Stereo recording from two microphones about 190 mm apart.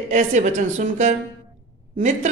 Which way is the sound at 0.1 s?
40° right (ahead or behind).